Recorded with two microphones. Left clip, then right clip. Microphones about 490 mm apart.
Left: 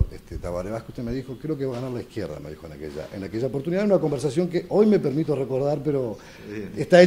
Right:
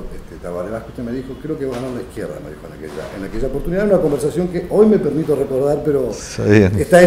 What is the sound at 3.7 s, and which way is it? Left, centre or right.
Speech, left.